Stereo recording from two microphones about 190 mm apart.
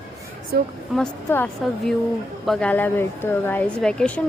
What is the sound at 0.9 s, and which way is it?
A woman's voice, 5° left (ahead or behind).